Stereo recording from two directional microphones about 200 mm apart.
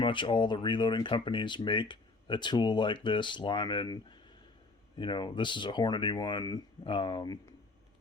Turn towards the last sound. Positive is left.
turn(degrees=20)  # may be behind; listen again after turning